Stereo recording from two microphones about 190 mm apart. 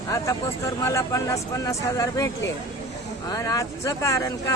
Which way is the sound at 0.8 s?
15° left (ahead or behind).